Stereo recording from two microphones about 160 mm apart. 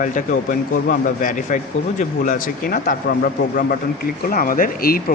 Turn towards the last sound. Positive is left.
turn(degrees=60)  # may be behind; listen again after turning